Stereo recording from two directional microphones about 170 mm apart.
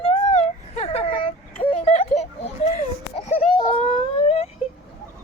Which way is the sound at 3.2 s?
35° left (ahead or behind).